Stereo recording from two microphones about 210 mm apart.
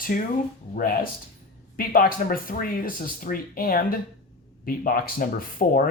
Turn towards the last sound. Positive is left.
turn(degrees=45)  # may be behind; listen again after turning